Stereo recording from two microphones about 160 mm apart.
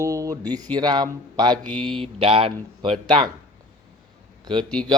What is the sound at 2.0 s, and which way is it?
Mantra, 35° right (ahead or behind).